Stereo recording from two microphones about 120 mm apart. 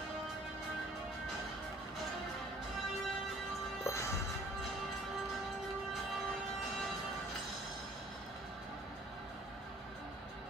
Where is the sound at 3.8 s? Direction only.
25° left (ahead or behind).